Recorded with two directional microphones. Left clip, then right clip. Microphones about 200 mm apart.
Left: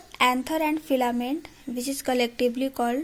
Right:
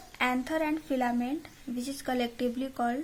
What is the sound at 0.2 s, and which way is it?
Speech, 30° left (ahead or behind).